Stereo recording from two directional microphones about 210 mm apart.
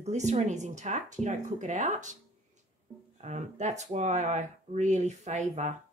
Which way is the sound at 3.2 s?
35° right (ahead or behind).